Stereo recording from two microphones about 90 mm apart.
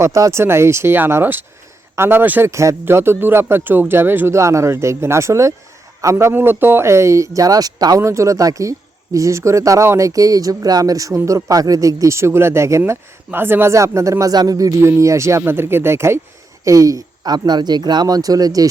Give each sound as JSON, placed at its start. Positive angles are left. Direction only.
{"t": 0.0, "sound": "speech", "side_deg": -35}
{"t": 2.5, "sound": "speech", "side_deg": -35}
{"t": 4.4, "sound": "speech", "side_deg": -35}
{"t": 8.0, "sound": "speech", "side_deg": -35}
{"t": 16.6, "sound": "speech", "side_deg": -40}